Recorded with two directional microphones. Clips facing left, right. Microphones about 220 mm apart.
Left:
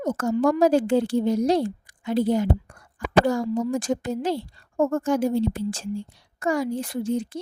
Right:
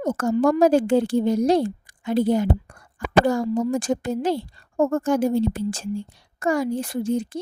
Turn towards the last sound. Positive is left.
turn(degrees=-45)  # may be behind; listen again after turning